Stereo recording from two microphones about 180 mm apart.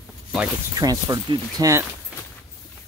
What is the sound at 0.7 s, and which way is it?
Speech, 20° right (ahead or behind).